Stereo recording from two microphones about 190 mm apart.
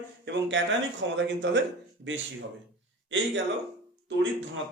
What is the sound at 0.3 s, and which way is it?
A man's voice, 70° right (ahead or behind).